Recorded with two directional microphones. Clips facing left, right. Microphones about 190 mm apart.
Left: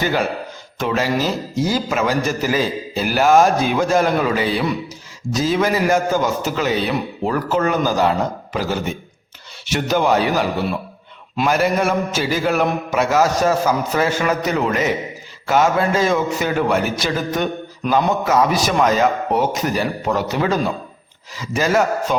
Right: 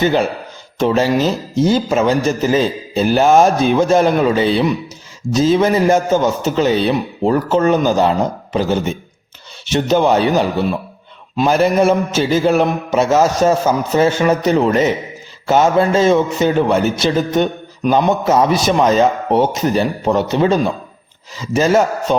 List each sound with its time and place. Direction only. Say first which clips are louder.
0.0 s a man's voice: right 5 dB; 25° right (ahead or behind)